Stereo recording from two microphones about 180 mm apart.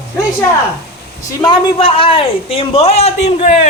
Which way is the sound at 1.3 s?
25° left (ahead or behind).